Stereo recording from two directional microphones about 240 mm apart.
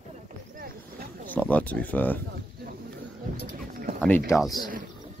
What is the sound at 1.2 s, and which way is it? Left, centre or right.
Speech, centre.